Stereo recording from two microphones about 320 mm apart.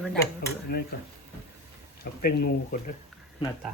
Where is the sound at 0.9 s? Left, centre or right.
Left.